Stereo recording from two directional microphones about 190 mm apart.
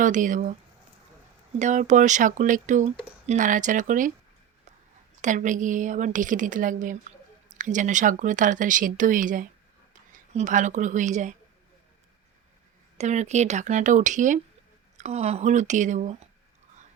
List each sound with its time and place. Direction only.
0.0 s speech: 40° right (ahead or behind)
1.5 s speech: 40° right (ahead or behind)
5.2 s speech: 40° right (ahead or behind)
13.0 s speech: 35° right (ahead or behind)